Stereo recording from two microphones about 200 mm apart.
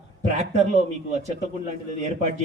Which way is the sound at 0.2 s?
35° right (ahead or behind).